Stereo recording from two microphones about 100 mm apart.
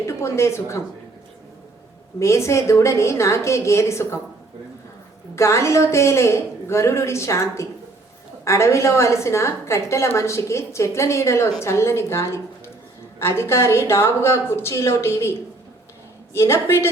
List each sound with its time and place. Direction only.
0.0 s speech: 30° left (ahead or behind)
2.1 s a woman's voice: 30° left (ahead or behind)
5.3 s a woman's voice: 30° left (ahead or behind)